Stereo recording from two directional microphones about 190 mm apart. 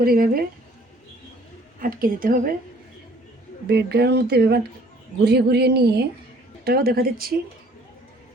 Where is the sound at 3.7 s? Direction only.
60° right (ahead or behind).